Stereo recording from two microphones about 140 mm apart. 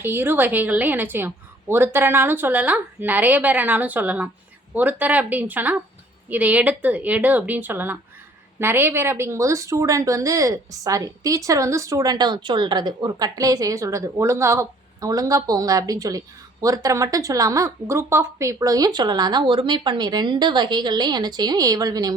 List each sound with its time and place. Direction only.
0.0 s a woman's voice: 15° right (ahead or behind)